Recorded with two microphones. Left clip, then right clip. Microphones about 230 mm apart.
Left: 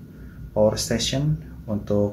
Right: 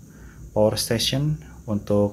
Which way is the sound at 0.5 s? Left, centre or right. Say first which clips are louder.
Even; right.